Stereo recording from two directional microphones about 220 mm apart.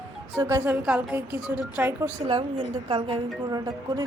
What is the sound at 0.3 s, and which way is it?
A woman's voice, 10° right (ahead or behind).